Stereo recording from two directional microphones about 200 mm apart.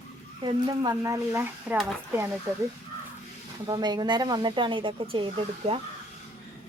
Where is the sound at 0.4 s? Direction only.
20° right (ahead or behind).